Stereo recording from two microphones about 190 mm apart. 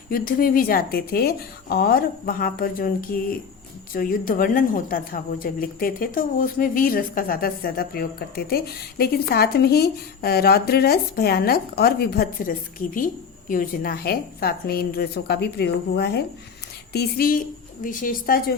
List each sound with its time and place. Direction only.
0.1 s a woman's voice: 50° left (ahead or behind)